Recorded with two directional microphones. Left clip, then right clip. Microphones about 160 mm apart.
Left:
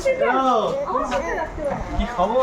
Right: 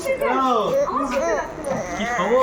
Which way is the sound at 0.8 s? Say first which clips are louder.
Right 2 dB; 20° right (ahead or behind).